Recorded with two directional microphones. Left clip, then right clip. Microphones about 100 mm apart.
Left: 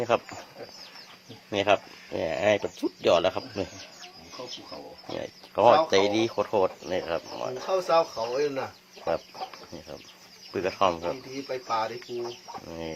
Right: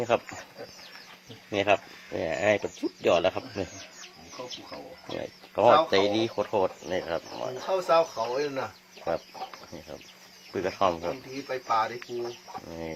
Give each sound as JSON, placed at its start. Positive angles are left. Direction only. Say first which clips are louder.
{"t": 0.1, "sound": "speech", "louder": "even", "side_deg": 0}
{"t": 1.5, "sound": "speech", "louder": "left 1 dB", "side_deg": 10}
{"t": 11.4, "sound": "speech", "louder": "right 2 dB", "side_deg": -25}
{"t": 12.6, "sound": "speech", "louder": "left 1 dB", "side_deg": 5}